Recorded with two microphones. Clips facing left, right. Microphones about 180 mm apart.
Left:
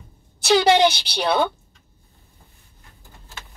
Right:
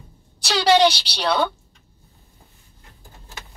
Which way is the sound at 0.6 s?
50° left (ahead or behind).